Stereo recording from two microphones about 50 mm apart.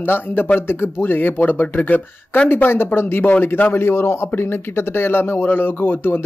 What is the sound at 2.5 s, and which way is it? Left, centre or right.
Speech, left.